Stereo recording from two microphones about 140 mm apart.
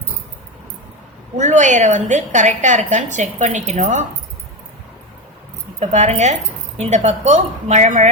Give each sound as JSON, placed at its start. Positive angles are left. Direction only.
{"t": 1.4, "sound": "a woman's voice", "side_deg": -60}
{"t": 5.8, "sound": "a woman's voice", "side_deg": -55}